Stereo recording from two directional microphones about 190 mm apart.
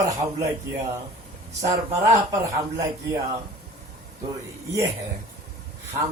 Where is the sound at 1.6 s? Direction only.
15° right (ahead or behind).